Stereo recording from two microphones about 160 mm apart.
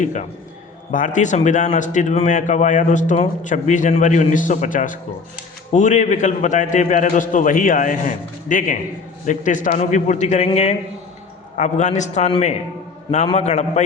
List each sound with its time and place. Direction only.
0.0 s a man's voice: 50° left (ahead or behind)